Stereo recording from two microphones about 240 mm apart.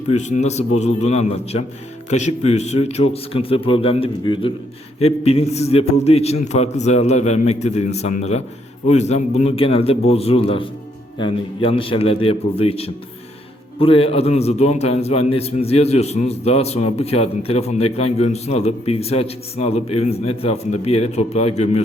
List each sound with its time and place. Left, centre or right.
0.1 s a man's voice: left